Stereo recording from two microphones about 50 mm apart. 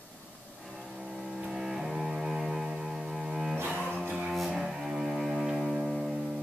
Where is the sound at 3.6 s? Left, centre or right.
Right.